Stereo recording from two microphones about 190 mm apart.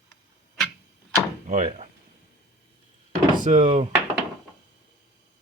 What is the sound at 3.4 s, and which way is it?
Speech, 40° right (ahead or behind).